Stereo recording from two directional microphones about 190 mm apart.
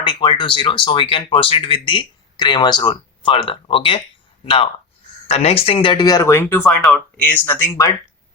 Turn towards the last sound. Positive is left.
turn(degrees=15)  # may be behind; listen again after turning